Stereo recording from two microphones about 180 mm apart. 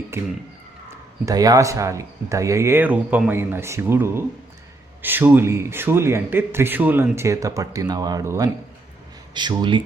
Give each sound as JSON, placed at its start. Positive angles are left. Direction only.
{"t": 0.1, "sound": "speech", "side_deg": -15}